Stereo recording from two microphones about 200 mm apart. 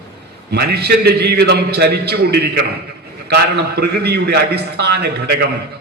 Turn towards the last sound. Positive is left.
turn(degrees=-55)  # may be behind; listen again after turning